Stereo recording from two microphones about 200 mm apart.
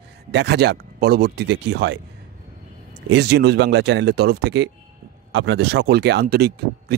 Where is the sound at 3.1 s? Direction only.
55° right (ahead or behind).